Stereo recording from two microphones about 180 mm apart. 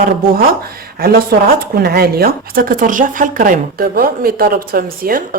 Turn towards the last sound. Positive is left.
turn(degrees=-55)  # may be behind; listen again after turning